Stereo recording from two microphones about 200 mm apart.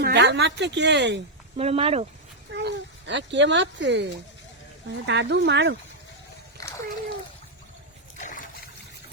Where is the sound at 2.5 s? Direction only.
60° right (ahead or behind).